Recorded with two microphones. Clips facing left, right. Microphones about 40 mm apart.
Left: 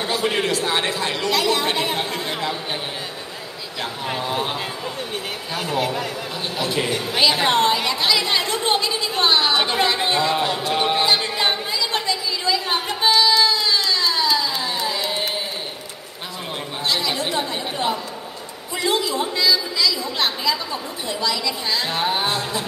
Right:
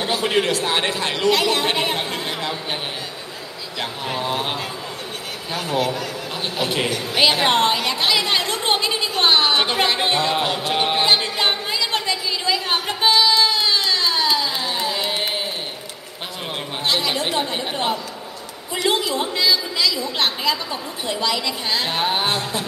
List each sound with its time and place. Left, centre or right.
0.2 s a man's voice: centre
0.7 s a woman's voice: right
2.2 s a sound: centre
5.6 s speech: centre
6.6 s a woman's voice: centre
8.6 s a sound: right
9.6 s a woman's voice: centre
9.8 s a woman's voice: right
11.3 s chatter: right
12.1 s a sound: right
13.4 s a sound: right
14.2 s carnatic music: right
16.8 s chatter: right
17.2 s a woman's voice: right